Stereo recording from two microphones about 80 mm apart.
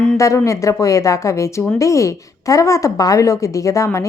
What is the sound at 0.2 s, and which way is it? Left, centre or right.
Speech, left.